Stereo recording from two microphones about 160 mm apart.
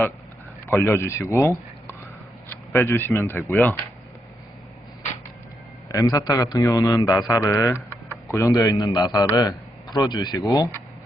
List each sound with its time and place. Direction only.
0.7 s speech: 15° left (ahead or behind)
5.9 s a man's voice: 20° left (ahead or behind)